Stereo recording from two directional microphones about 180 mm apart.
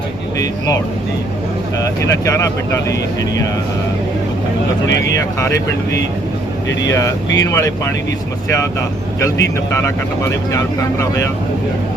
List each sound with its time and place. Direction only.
1.8 s speech: 15° left (ahead or behind)
5.4 s speech: 15° left (ahead or behind)
7.3 s speech: 20° left (ahead or behind)
9.2 s speech: 15° left (ahead or behind)